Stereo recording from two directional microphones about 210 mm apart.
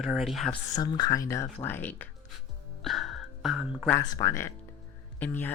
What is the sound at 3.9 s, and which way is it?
Speech, 15° left (ahead or behind).